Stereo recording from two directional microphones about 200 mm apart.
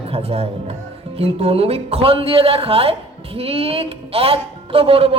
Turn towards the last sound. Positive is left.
turn(degrees=-30)  # may be behind; listen again after turning